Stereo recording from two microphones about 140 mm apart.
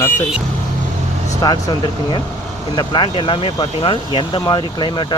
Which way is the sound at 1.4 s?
30° left (ahead or behind).